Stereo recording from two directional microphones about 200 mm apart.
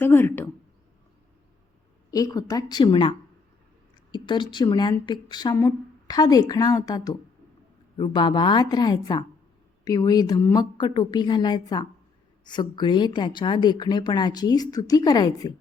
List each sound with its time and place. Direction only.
0.0 s speech: 10° left (ahead or behind)
2.0 s a woman's voice: 15° left (ahead or behind)